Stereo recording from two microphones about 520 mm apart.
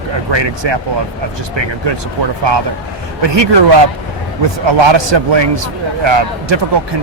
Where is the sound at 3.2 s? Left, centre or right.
Right.